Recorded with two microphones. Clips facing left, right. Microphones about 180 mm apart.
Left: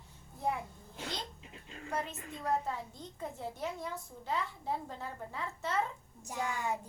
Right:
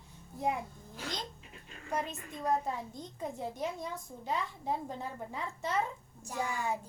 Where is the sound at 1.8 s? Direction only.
15° right (ahead or behind).